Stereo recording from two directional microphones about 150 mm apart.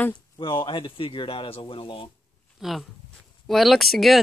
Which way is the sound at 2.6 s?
Centre (ahead or behind).